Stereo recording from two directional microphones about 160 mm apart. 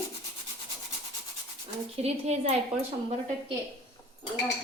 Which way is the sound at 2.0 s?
40° right (ahead or behind).